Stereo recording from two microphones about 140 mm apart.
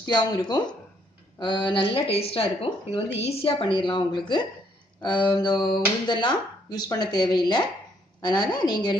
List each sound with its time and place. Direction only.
0.0 s speech: 30° left (ahead or behind)